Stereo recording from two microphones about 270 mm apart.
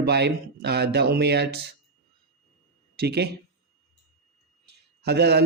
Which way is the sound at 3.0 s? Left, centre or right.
Right.